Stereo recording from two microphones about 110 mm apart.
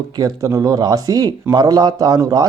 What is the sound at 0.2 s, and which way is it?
Speech, 30° right (ahead or behind).